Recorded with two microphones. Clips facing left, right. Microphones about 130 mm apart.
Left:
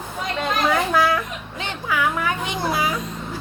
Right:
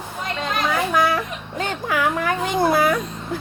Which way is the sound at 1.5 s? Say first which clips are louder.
Right 2 dB; 45° right (ahead or behind).